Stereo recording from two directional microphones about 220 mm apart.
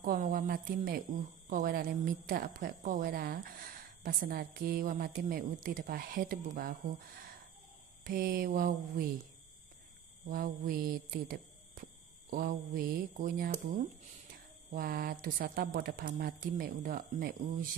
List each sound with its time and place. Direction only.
0.0 s a woman's voice: 40° right (ahead or behind)
8.0 s a sound: 40° right (ahead or behind)
10.2 s speech: 40° right (ahead or behind)
14.7 s a woman's voice: 40° right (ahead or behind)